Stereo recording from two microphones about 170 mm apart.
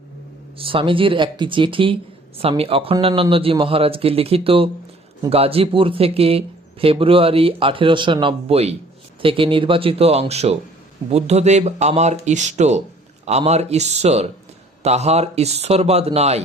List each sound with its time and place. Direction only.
0.6 s speech: 30° right (ahead or behind)